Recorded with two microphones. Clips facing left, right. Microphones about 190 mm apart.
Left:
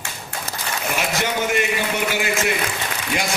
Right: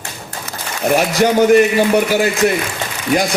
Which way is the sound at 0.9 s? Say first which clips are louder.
Right 11 dB; 40° right (ahead or behind).